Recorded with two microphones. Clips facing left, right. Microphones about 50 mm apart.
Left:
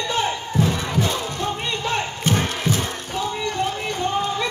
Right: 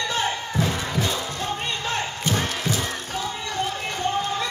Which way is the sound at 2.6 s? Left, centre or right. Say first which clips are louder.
Left 3 dB; left.